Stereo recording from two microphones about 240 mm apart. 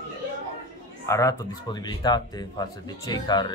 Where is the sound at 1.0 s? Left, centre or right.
Centre.